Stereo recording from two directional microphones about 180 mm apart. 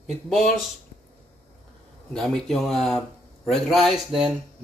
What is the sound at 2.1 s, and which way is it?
A man's voice, 5° left (ahead or behind).